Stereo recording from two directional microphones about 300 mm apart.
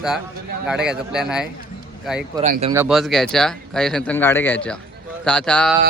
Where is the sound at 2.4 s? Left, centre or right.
Right.